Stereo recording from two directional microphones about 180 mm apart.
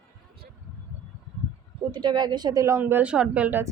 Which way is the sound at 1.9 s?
25° right (ahead or behind).